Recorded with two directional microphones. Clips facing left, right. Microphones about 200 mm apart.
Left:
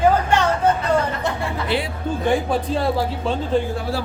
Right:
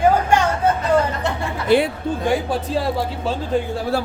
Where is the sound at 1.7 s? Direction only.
45° right (ahead or behind).